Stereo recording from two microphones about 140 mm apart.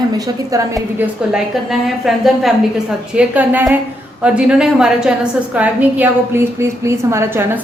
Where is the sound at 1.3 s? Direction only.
5° right (ahead or behind).